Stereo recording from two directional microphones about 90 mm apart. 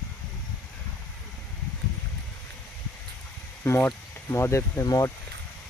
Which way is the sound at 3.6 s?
25° left (ahead or behind).